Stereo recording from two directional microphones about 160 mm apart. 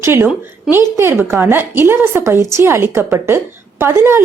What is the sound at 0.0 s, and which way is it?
A woman's voice, 15° right (ahead or behind).